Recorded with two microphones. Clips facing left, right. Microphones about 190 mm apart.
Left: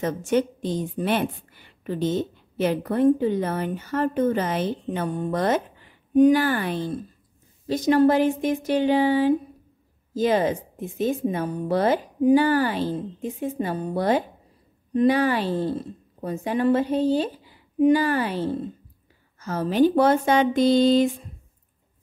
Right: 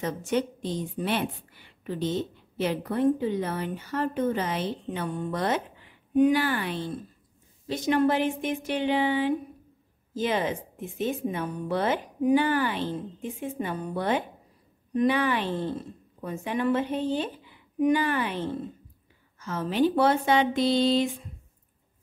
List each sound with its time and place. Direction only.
0.0 s a woman's voice: 50° left (ahead or behind)